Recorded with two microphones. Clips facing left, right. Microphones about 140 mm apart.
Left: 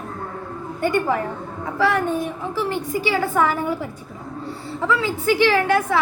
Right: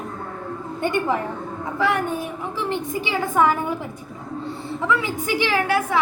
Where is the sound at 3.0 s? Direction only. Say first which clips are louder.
Right 1 dB; 20° right (ahead or behind).